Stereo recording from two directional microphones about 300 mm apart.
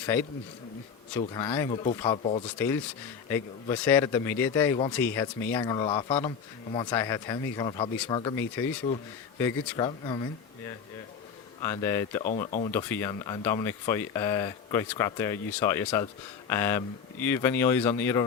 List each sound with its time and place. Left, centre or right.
0.0 s speech: centre
2.6 s speech: centre
11.6 s speech: centre
12.5 s speech: left
12.7 s speech: centre